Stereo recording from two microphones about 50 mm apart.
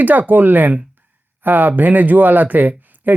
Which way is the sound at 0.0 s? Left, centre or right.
Right.